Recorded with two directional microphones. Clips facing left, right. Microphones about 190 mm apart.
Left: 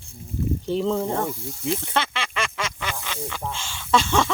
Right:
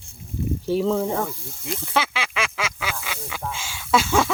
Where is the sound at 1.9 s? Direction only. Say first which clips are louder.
Right 2 dB; 5° right (ahead or behind).